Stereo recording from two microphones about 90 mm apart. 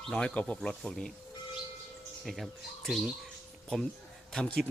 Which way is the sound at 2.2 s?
Centre (ahead or behind).